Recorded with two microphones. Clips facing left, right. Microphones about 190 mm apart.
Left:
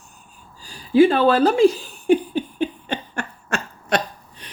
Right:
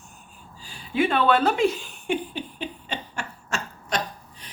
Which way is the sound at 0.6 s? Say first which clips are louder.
Left 10 dB; 35° left (ahead or behind).